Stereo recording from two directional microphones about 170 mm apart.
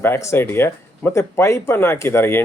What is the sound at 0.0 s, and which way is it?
Speech, 15° left (ahead or behind).